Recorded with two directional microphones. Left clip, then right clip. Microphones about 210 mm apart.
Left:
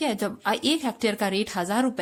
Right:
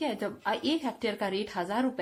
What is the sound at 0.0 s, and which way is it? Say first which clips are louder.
A woman's voice: left 5 dB; 50° left (ahead or behind).